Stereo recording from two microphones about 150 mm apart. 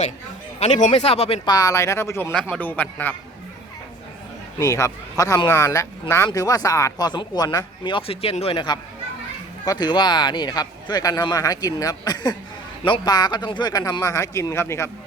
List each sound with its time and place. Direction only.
0.6 s speech: 50° left (ahead or behind)
1.5 s speech: 25° left (ahead or behind)
2.3 s a man's voice: 5° left (ahead or behind)
4.6 s speech: 20° left (ahead or behind)